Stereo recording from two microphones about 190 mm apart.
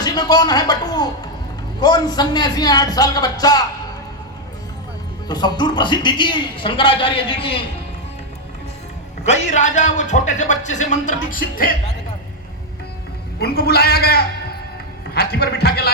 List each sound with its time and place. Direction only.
0.0 s a man's voice: 20° left (ahead or behind)
5.3 s a man's voice: 20° left (ahead or behind)
9.2 s speech: 35° left (ahead or behind)
13.4 s a man's voice: 55° left (ahead or behind)